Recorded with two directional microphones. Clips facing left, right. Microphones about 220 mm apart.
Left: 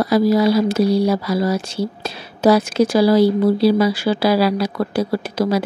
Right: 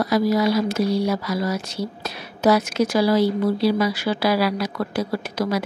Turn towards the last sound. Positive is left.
turn(degrees=30)  # may be behind; listen again after turning